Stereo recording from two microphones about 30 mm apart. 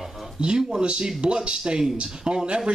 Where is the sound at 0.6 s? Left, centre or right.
Right.